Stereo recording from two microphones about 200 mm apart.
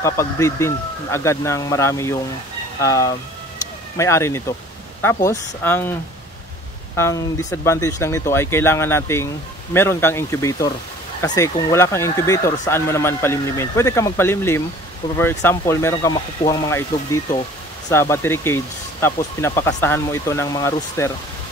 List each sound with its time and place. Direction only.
0.0 s speech: 15° left (ahead or behind)
7.0 s speech: 15° left (ahead or behind)